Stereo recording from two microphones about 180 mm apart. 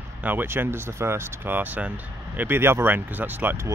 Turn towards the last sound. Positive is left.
turn(degrees=-15)  # may be behind; listen again after turning